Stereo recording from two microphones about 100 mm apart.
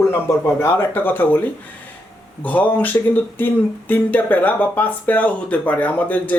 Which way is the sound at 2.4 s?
15° left (ahead or behind).